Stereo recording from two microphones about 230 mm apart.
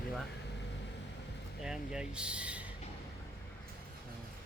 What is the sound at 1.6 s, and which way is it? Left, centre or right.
Vehicle, centre.